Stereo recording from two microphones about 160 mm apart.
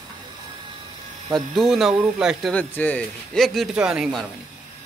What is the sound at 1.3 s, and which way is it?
Speech, centre (ahead or behind).